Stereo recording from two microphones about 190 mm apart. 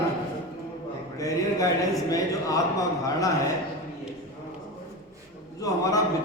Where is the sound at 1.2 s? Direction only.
20° left (ahead or behind).